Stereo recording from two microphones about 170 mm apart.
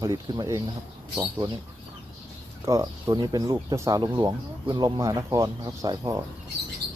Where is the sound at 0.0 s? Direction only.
20° right (ahead or behind).